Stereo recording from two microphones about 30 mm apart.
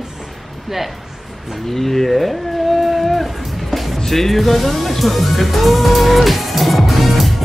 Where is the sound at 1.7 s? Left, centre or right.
Centre.